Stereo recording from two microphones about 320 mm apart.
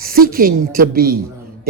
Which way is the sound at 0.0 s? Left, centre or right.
Right.